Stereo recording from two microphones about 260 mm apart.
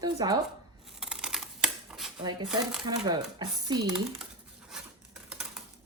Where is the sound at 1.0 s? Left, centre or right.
Centre.